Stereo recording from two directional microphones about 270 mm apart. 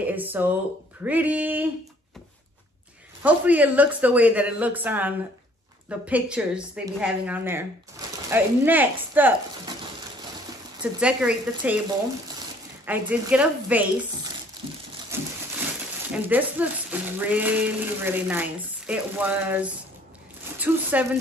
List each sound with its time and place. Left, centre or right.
0.0 s speech: centre
3.2 s speech: centre
10.8 s speech: centre
12.8 s speech: centre
15.1 s a sound: centre
16.3 s speech: centre